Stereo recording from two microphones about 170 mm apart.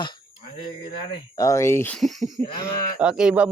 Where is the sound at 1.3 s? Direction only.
20° left (ahead or behind).